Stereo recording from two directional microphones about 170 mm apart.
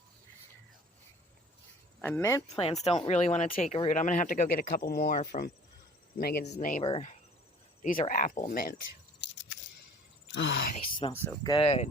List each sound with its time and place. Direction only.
2.0 s speech: 15° left (ahead or behind)
2.5 s speech: 35° left (ahead or behind); by 5.5 s 55° left (ahead or behind)
6.1 s speech: 65° left (ahead or behind)
6.4 s speech: 45° left (ahead or behind)
6.8 s speech: 35° left (ahead or behind)
8.0 s speech: 50° left (ahead or behind)
9.2 s a sound: 90° left
10.2 s speech: 90° left
11.1 s speech: 15° left (ahead or behind)
11.4 s speech: 30° left (ahead or behind)